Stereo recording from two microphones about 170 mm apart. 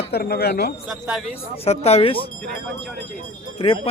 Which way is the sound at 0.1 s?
65° left (ahead or behind).